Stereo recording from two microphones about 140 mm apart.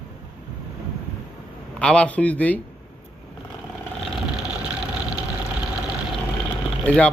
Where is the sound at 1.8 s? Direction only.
10° left (ahead or behind).